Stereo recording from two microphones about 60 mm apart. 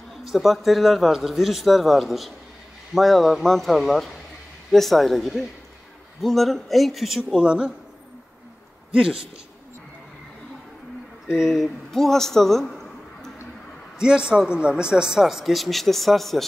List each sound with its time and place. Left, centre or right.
0.2 s speech: centre
7.4 s speech: centre
8.9 s speech: centre
11.2 s a man's voice: centre
13.9 s speech: centre